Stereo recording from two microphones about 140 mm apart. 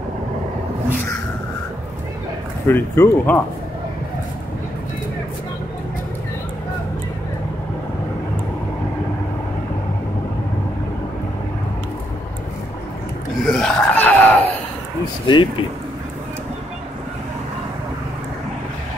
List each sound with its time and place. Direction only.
2.7 s speech: 15° left (ahead or behind)
13.5 s a sound: 5° left (ahead or behind)
15.2 s speech: 35° left (ahead or behind)